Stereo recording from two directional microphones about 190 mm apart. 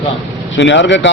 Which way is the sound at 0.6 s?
70° left (ahead or behind).